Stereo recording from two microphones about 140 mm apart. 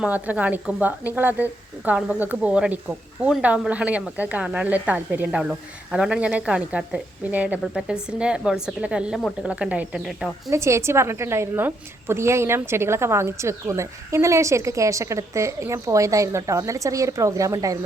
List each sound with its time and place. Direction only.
0.0 s a woman's voice: 10° right (ahead or behind)
10.5 s a woman's voice: 20° right (ahead or behind)